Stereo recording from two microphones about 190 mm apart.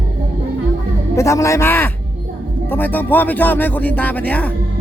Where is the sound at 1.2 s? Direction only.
15° left (ahead or behind).